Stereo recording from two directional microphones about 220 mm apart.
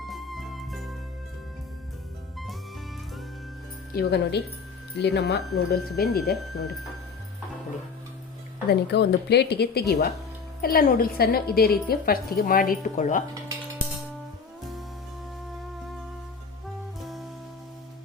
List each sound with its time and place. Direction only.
0.1 s music: centre (ahead or behind)
3.9 s a woman's voice: 50° left (ahead or behind)
8.6 s a woman's voice: 50° left (ahead or behind)
17.0 s music: centre (ahead or behind)